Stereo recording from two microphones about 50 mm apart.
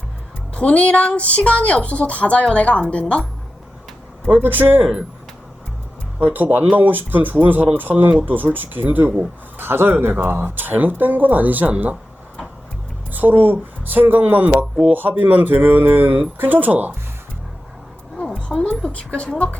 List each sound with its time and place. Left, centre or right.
0.5 s a woman's voice: left
4.4 s speech: right
6.1 s speech: right
13.1 s speech: right
18.4 s music: left
18.9 s a woman's voice: left